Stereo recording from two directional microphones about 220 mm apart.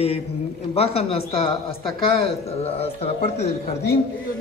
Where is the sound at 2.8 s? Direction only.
30° left (ahead or behind).